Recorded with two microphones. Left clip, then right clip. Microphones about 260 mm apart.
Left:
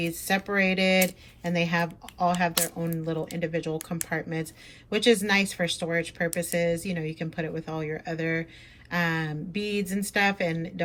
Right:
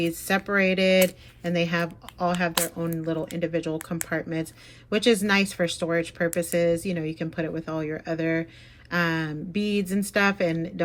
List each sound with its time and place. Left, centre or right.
0.0 s speech: centre